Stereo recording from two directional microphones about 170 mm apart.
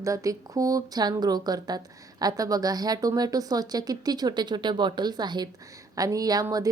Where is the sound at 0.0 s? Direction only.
20° right (ahead or behind).